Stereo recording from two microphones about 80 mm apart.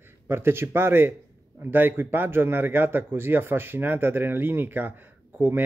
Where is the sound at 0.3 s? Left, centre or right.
Right.